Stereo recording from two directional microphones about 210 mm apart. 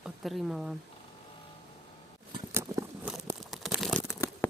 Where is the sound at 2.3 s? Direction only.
20° right (ahead or behind).